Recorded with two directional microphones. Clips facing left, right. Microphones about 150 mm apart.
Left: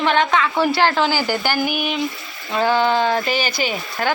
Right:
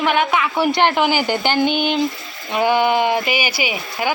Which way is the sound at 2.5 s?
15° right (ahead or behind).